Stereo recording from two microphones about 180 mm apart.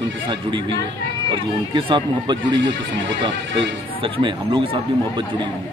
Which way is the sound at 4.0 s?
25° right (ahead or behind).